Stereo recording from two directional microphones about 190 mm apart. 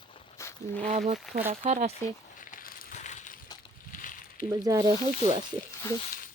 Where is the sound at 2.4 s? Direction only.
45° left (ahead or behind).